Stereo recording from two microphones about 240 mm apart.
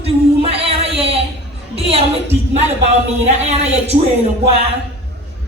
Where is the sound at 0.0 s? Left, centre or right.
Right.